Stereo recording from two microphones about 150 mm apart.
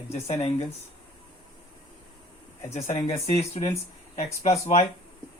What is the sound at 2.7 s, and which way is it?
Speech, 50° left (ahead or behind).